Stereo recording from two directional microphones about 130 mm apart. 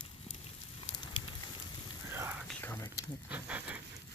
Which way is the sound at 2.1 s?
15° right (ahead or behind).